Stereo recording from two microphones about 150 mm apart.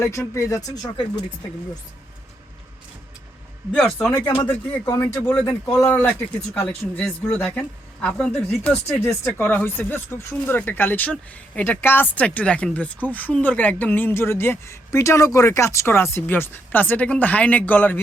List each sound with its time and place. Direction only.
0.0 s speech: 20° left (ahead or behind)
3.7 s speech: 5° left (ahead or behind)
4.4 s speech: 20° left (ahead or behind)